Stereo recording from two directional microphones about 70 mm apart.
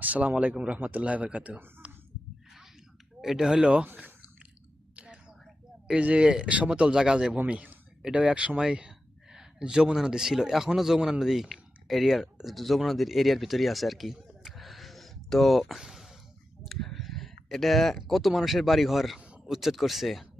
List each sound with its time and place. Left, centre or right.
0.0 s speech: right
3.2 s speech: centre
4.9 s a sound: centre
5.9 s a man's voice: centre
7.3 s speech: right; by 19.1 s centre
19.1 s a sound: centre
19.5 s speech: centre